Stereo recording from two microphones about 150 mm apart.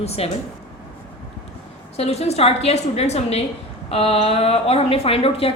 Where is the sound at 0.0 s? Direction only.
45° left (ahead or behind).